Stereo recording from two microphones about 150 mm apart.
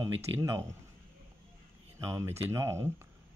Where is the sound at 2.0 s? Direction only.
20° right (ahead or behind).